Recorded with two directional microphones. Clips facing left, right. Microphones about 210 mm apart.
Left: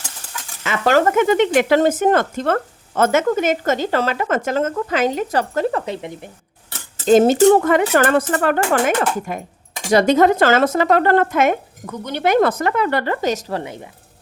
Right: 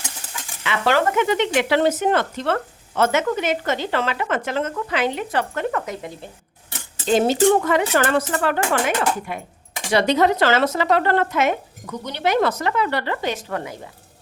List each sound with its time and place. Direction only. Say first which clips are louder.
0.6 s speech: left 4 dB; 45° left (ahead or behind); by 6.3 s 20° left (ahead or behind)
7.1 s speech: left 5 dB; 45° left (ahead or behind)